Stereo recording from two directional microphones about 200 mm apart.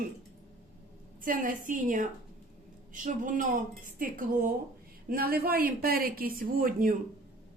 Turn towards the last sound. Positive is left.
turn(degrees=-45)  # may be behind; listen again after turning